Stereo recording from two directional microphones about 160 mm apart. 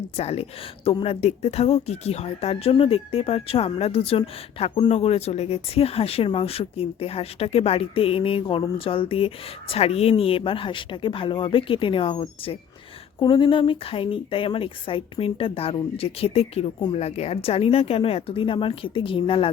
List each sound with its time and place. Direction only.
0.2 s speech: 40° left (ahead or behind)